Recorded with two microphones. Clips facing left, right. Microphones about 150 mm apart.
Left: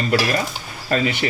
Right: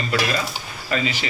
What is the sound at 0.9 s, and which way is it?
Speech, 55° left (ahead or behind).